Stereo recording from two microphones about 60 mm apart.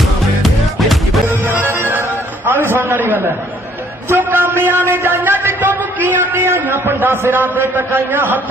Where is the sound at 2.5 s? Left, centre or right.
Right.